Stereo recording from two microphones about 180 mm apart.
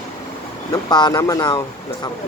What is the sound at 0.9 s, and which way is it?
Speech, 25° left (ahead or behind).